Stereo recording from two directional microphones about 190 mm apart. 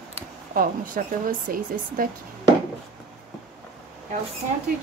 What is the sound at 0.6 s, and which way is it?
A woman's voice, 45° right (ahead or behind).